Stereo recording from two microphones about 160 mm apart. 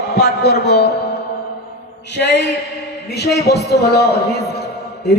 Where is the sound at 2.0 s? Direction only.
90° left.